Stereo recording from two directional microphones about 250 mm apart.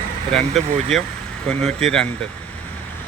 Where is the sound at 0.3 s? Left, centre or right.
Centre.